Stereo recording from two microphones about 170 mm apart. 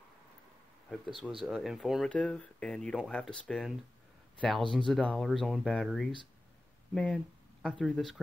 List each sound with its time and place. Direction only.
1.4 s speech: centre (ahead or behind)